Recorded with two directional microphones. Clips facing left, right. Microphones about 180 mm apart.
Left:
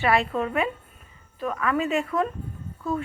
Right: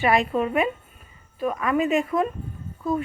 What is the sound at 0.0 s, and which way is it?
Speech, 15° right (ahead or behind).